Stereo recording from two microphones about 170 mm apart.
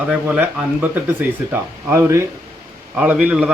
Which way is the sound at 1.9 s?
15° right (ahead or behind).